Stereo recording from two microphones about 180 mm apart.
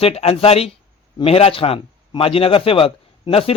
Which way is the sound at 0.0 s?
35° left (ahead or behind).